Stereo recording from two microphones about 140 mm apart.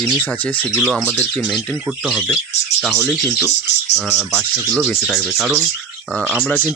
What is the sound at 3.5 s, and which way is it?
Speech, 15° right (ahead or behind).